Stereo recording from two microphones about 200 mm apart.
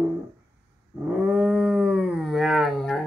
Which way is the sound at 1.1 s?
5° right (ahead or behind).